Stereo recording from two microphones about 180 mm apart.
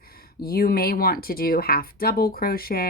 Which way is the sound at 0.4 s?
55° left (ahead or behind).